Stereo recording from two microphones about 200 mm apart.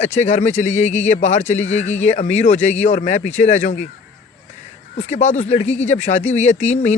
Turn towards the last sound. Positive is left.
turn(degrees=35)  # may be behind; listen again after turning